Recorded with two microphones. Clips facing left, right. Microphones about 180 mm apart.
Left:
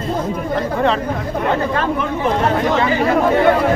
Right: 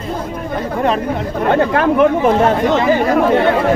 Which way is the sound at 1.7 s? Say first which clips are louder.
Right 8 dB; 65° right (ahead or behind).